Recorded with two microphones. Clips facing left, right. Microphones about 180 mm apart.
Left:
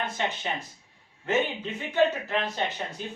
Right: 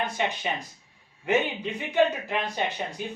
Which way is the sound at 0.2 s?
15° right (ahead or behind).